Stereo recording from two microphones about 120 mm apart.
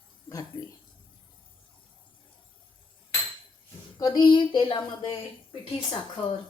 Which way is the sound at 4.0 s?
35° left (ahead or behind).